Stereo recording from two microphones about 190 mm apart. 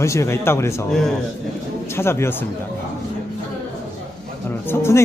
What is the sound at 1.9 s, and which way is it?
Speech, 15° left (ahead or behind).